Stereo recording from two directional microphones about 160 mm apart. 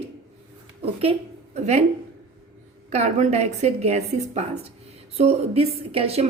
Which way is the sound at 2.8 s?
45° right (ahead or behind).